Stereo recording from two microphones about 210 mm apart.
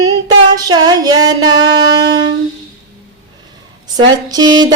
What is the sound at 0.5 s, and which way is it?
Music, 20° right (ahead or behind).